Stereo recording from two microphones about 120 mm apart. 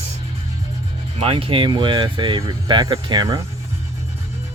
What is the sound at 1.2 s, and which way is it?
Speech, 50° right (ahead or behind).